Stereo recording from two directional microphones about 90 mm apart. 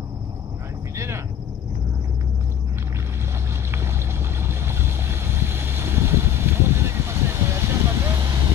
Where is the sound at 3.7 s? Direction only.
30° right (ahead or behind).